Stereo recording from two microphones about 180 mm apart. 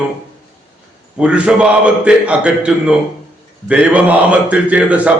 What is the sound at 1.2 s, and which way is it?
A man's voice, 5° right (ahead or behind).